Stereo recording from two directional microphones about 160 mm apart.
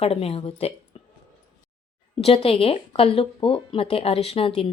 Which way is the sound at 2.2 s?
35° left (ahead or behind).